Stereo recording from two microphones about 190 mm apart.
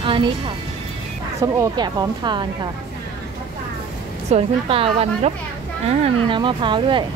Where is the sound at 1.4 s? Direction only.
20° right (ahead or behind).